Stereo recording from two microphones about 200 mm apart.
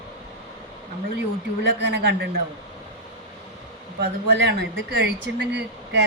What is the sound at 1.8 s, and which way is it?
Speech, 55° right (ahead or behind).